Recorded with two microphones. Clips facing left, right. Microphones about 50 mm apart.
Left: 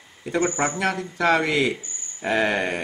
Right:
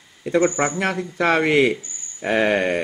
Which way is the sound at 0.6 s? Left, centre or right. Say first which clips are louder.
Right 2 dB; right.